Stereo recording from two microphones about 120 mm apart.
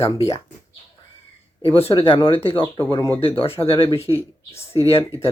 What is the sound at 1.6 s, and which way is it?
Speech, 50° left (ahead or behind).